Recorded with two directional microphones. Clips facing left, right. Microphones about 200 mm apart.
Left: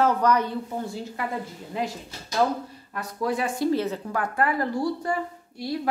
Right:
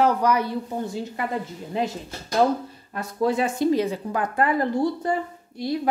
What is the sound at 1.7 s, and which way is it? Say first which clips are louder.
Speech: right 3 dB; 25° right (ahead or behind).